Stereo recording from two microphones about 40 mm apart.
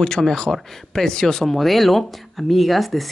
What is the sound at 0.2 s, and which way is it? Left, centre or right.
Speech, centre.